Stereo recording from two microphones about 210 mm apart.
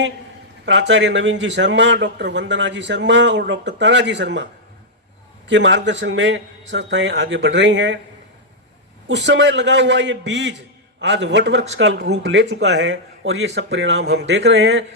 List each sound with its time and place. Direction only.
0.6 s a man's voice: 60° right (ahead or behind)
5.5 s a man's voice: 60° right (ahead or behind)
9.0 s a man's voice: 55° right (ahead or behind)